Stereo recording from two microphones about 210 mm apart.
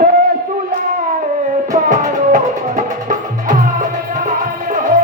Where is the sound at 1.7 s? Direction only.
40° right (ahead or behind).